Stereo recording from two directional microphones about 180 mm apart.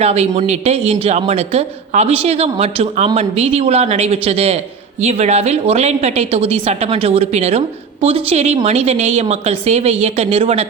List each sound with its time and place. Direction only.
0.0 s speech: 35° right (ahead or behind)